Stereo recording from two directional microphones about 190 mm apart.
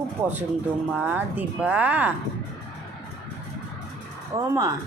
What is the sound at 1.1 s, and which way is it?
Speech, 10° right (ahead or behind).